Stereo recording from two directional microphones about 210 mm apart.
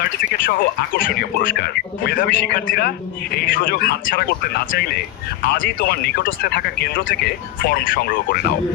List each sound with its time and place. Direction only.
0.4 s speech: 40° left (ahead or behind)